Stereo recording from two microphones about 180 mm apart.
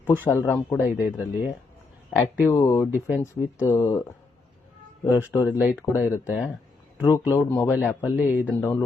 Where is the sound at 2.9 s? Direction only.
10° right (ahead or behind).